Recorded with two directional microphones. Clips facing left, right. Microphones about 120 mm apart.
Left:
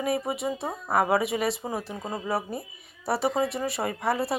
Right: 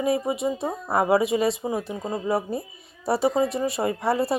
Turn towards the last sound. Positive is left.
turn(degrees=-25)  # may be behind; listen again after turning